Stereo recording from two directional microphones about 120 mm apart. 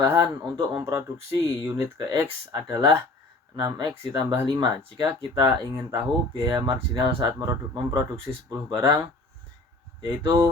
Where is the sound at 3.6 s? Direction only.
35° right (ahead or behind).